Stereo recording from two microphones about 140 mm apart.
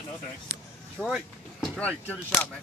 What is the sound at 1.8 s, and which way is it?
Speech, 10° left (ahead or behind).